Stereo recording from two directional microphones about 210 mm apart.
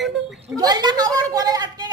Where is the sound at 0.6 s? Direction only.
20° right (ahead or behind).